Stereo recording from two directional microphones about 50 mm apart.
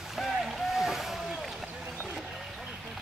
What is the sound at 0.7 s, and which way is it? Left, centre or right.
Boat, centre.